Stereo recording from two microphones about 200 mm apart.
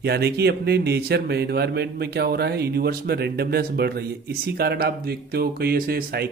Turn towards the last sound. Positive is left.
turn(degrees=-50)  # may be behind; listen again after turning